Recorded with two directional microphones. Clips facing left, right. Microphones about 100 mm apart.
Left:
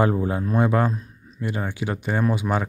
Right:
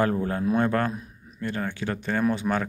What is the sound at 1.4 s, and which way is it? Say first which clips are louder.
Speech: left 2 dB; 15° left (ahead or behind).